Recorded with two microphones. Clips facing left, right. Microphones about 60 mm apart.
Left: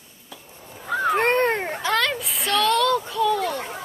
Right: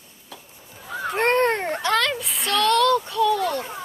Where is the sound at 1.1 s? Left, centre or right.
Centre.